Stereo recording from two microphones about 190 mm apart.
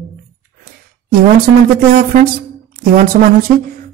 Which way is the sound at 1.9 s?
45° right (ahead or behind).